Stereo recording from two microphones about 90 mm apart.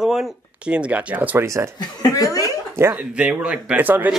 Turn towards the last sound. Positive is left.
turn(degrees=-20)  # may be behind; listen again after turning